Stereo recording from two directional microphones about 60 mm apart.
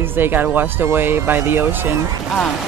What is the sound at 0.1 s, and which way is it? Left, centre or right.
Speech, right.